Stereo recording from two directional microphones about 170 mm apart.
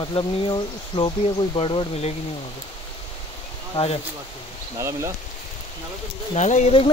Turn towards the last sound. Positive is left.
turn(degrees=45)  # may be behind; listen again after turning